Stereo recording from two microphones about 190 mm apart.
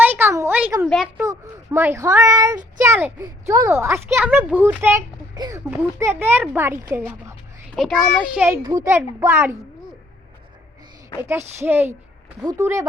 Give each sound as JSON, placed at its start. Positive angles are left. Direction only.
{"t": 0.0, "sound": "a sound", "side_deg": -10}
{"t": 1.2, "sound": "a child's voice", "side_deg": -15}
{"t": 7.8, "sound": "a child's voice", "side_deg": 0}
{"t": 8.6, "sound": "a child's voice", "side_deg": -20}
{"t": 11.2, "sound": "a child's voice", "side_deg": -15}